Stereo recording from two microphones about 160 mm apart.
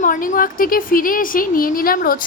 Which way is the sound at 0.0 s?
55° left (ahead or behind).